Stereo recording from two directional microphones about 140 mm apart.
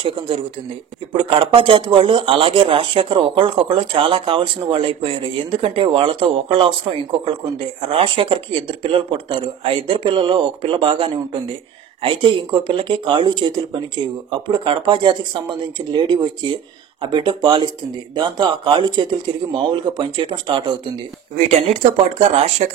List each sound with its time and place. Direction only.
0.0 s speech: 40° right (ahead or behind)
21.4 s speech: 50° right (ahead or behind)